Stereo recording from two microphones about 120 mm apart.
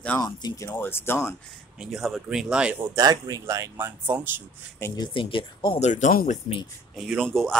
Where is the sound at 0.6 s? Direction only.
20° left (ahead or behind).